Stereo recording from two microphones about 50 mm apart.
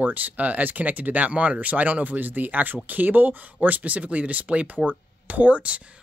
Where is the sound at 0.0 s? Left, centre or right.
Right.